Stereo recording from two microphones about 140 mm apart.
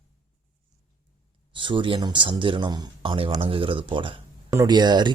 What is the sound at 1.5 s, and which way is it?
Speech, 35° right (ahead or behind).